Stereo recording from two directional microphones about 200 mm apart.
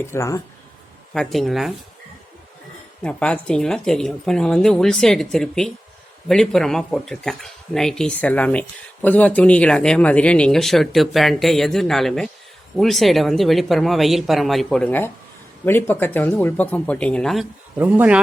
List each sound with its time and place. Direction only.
0.0 s speech: 15° left (ahead or behind)
1.1 s speech: centre (ahead or behind)
3.0 s speech: 5° left (ahead or behind)
17.7 s speech: 10° right (ahead or behind)